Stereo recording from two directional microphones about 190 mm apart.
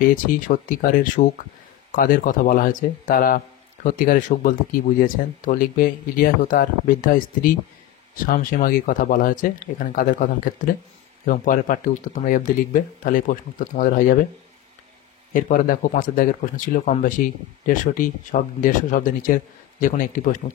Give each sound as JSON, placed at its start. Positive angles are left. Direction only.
{"t": 0.0, "sound": "speech", "side_deg": 45}
{"t": 15.3, "sound": "speech", "side_deg": 45}